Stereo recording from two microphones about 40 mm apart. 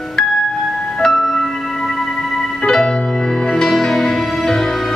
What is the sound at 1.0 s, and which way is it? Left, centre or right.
Music, centre.